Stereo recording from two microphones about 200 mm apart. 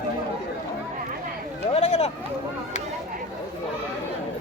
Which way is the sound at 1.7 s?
30° left (ahead or behind).